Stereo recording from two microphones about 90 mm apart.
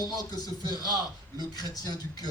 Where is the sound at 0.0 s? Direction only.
45° left (ahead or behind).